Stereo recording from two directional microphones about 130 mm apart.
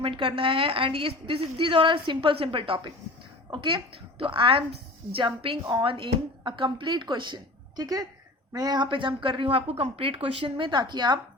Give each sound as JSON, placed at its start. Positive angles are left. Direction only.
{"t": 0.0, "sound": "a woman's voice", "side_deg": -45}